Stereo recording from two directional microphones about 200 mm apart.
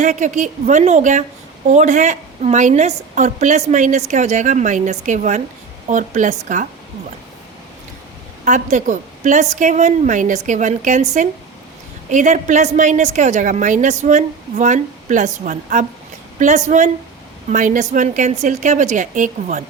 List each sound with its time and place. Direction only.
0.0 s a woman's voice: 40° right (ahead or behind)
8.4 s a woman's voice: 35° right (ahead or behind)